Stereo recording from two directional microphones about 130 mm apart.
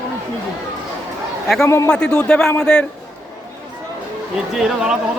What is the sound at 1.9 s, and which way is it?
Speech, 10° left (ahead or behind).